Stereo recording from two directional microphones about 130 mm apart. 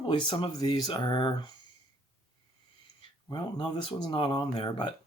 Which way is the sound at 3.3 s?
35° left (ahead or behind).